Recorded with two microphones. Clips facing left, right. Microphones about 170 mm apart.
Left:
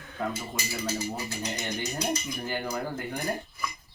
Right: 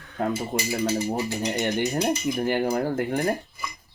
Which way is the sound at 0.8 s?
30° right (ahead or behind).